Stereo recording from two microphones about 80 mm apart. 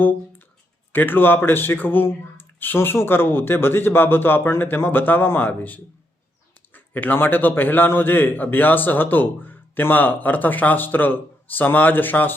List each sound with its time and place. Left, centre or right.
0.0 s a man's voice: left